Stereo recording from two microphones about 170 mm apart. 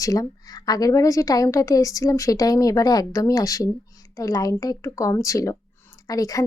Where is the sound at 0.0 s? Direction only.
20° left (ahead or behind).